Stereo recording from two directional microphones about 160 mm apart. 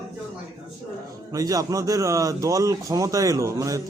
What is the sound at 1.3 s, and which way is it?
Speech, 20° right (ahead or behind).